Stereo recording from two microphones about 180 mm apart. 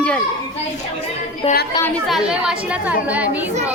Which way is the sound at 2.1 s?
5° right (ahead or behind).